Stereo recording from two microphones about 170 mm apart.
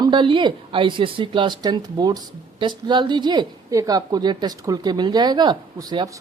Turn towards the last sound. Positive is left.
turn(degrees=-25)  # may be behind; listen again after turning